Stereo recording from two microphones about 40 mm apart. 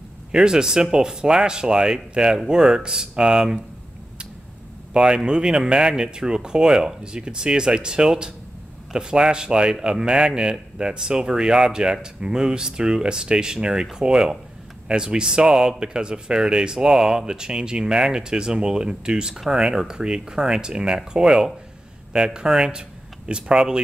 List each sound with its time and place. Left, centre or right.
0.3 s a man's voice: centre
4.9 s a man's voice: right